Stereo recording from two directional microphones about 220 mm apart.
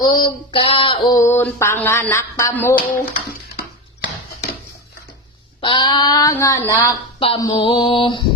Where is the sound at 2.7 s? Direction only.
40° left (ahead or behind).